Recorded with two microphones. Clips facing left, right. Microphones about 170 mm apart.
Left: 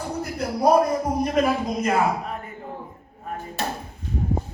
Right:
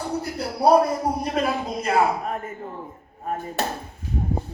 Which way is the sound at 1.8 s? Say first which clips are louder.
Right 3 dB; 45° right (ahead or behind).